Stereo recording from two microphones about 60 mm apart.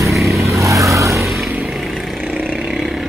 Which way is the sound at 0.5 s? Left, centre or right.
Right.